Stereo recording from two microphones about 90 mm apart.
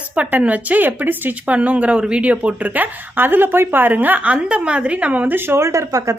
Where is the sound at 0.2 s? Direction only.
20° right (ahead or behind).